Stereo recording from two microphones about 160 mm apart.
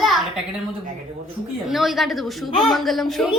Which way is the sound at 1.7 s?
Centre (ahead or behind).